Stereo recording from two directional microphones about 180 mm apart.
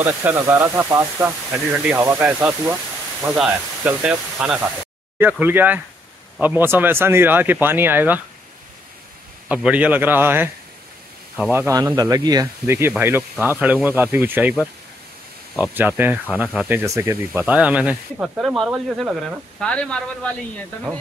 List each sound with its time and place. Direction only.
0.0 s speech: 10° right (ahead or behind)
9.5 s speech: 5° right (ahead or behind)
11.6 s speech: 20° right (ahead or behind)
15.5 s speech: 10° right (ahead or behind)